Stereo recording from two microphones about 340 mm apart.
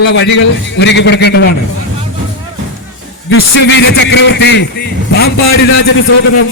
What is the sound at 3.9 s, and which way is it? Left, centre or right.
Speech, left.